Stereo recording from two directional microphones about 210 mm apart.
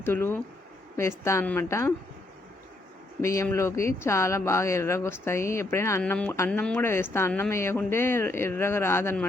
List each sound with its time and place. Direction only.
0.0 s speech: 10° left (ahead or behind)
3.2 s speech: 15° left (ahead or behind)